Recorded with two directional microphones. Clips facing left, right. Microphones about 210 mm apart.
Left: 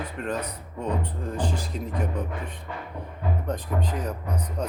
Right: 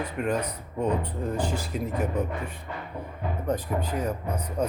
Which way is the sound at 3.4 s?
10° right (ahead or behind).